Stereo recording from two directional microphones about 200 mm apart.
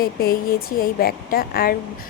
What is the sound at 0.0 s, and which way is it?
Speech, 45° left (ahead or behind).